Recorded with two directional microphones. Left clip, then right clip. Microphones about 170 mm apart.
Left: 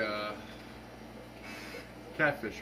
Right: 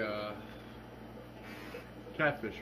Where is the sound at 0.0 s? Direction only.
15° left (ahead or behind).